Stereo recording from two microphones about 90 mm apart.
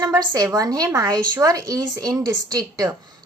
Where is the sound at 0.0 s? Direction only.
35° right (ahead or behind).